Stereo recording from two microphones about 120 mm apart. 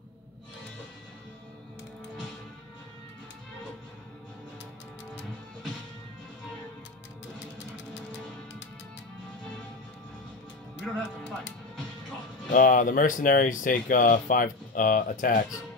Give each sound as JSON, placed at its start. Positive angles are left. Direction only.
{"t": 10.9, "sound": "speech", "side_deg": 5}
{"t": 12.4, "sound": "speech", "side_deg": 90}